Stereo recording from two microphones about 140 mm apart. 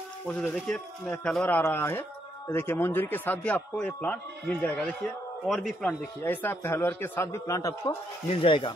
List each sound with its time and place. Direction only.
0.3 s a man's voice: 5° left (ahead or behind)
5.9 s a man's voice: 15° left (ahead or behind)
8.3 s speech: 40° left (ahead or behind)